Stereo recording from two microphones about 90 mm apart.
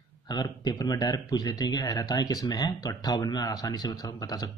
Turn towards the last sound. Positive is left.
turn(degrees=45)  # may be behind; listen again after turning